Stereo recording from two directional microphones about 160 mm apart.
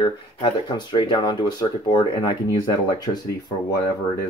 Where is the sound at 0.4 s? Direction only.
30° left (ahead or behind).